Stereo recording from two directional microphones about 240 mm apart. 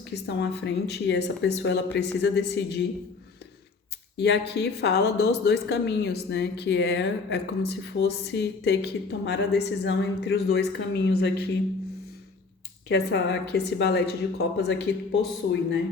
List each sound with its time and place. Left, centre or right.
0.1 s a woman's voice: left
4.2 s a woman's voice: left
12.9 s a woman's voice: left